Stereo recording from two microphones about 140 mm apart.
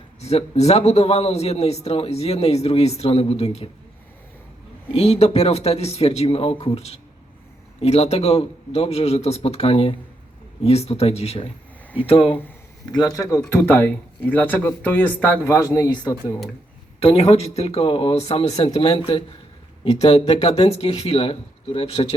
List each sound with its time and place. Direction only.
0.2 s a man's voice: 50° left (ahead or behind)
4.9 s a man's voice: 50° left (ahead or behind)
12.9 s speech: 25° left (ahead or behind)
17.0 s a man's voice: 45° left (ahead or behind)